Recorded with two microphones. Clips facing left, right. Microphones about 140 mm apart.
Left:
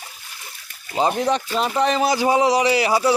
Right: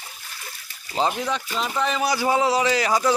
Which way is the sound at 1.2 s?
35° left (ahead or behind).